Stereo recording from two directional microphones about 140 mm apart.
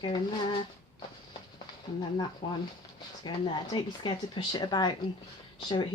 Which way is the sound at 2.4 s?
35° left (ahead or behind).